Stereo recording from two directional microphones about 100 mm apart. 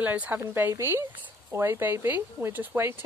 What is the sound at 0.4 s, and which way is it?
Speech, 25° right (ahead or behind).